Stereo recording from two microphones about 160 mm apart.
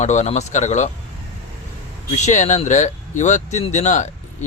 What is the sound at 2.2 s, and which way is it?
Speech, 45° left (ahead or behind).